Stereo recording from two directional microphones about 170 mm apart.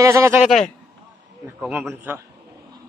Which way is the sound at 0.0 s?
20° right (ahead or behind).